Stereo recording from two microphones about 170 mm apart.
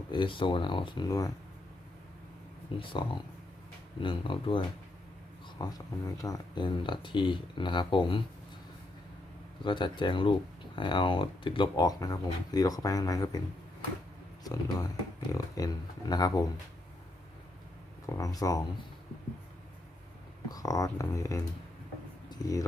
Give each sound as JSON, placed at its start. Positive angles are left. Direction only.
{"t": 0.1, "sound": "speech", "side_deg": 30}
{"t": 2.7, "sound": "speech", "side_deg": 30}
{"t": 4.0, "sound": "speech", "side_deg": 30}
{"t": 9.6, "sound": "speech", "side_deg": 30}
{"t": 14.4, "sound": "speech", "side_deg": 20}
{"t": 18.0, "sound": "speech", "side_deg": 20}
{"t": 20.5, "sound": "speech", "side_deg": 20}
{"t": 22.3, "sound": "a sound", "side_deg": 20}